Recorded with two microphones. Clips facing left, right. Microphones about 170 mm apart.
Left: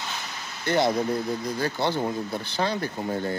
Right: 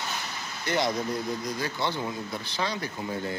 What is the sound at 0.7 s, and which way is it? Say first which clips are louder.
Speech: left 5 dB; 30° left (ahead or behind).